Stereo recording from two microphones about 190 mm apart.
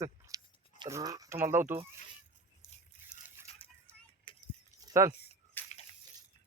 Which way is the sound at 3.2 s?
10° right (ahead or behind).